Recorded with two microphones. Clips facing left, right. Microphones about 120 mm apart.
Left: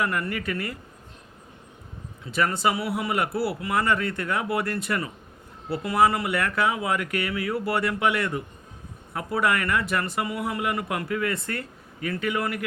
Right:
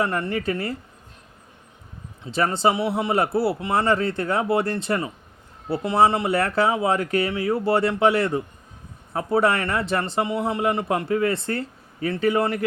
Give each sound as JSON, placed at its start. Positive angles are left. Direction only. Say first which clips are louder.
{"t": 0.0, "sound": "a man's voice", "louder": "right 4 dB", "side_deg": -30}
{"t": 2.2, "sound": "a man's voice", "louder": "right 3 dB", "side_deg": -30}